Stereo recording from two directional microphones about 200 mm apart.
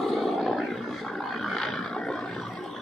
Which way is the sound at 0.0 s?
Centre (ahead or behind).